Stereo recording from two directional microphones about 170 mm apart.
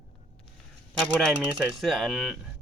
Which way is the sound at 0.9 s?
5° left (ahead or behind).